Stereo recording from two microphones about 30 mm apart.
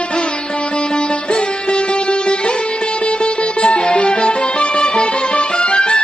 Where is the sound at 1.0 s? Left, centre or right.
Left.